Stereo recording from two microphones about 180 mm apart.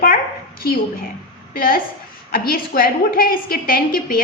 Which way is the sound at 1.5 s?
55° left (ahead or behind).